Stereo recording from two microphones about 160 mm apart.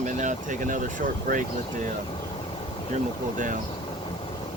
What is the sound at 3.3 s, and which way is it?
Speech, 55° right (ahead or behind).